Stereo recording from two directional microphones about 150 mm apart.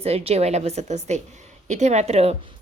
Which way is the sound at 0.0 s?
40° right (ahead or behind).